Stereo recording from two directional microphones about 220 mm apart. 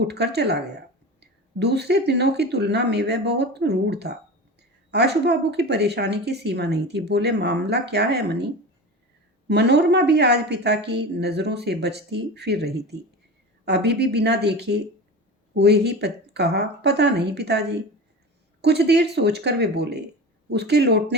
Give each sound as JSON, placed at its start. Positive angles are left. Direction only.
{"t": 0.0, "sound": "speech", "side_deg": -50}
{"t": 9.5, "sound": "speech", "side_deg": -50}